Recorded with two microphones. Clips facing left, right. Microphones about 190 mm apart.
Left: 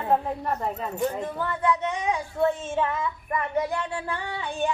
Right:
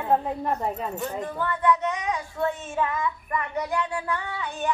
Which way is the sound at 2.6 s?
25° left (ahead or behind).